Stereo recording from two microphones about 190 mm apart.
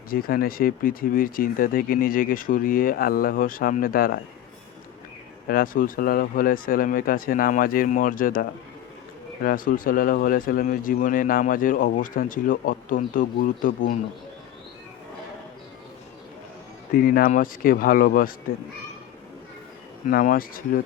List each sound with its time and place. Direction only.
0.1 s speech: 50° left (ahead or behind)
5.5 s speech: 50° left (ahead or behind)
16.9 s speech: 50° left (ahead or behind)
20.1 s speech: 45° left (ahead or behind)